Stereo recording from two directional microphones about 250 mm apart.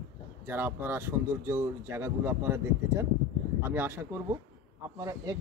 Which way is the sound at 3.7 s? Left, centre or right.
Centre.